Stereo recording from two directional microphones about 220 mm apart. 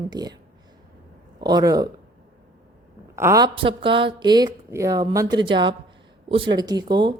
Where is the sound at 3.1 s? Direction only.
15° right (ahead or behind).